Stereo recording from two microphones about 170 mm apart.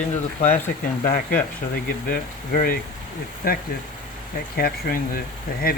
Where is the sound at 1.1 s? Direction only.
55° left (ahead or behind).